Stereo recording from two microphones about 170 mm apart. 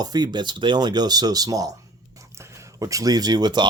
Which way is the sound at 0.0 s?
25° right (ahead or behind).